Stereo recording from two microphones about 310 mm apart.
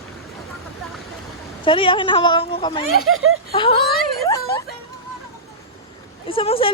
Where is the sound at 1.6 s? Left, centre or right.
Centre.